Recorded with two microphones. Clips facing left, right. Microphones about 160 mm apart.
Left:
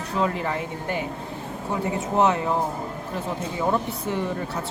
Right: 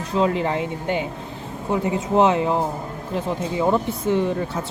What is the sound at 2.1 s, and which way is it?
Speech, 20° right (ahead or behind).